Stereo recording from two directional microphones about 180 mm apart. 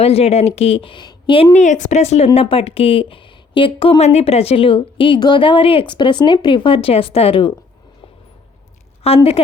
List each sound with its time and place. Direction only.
0.0 s speech: 35° left (ahead or behind)
9.0 s speech: 30° left (ahead or behind)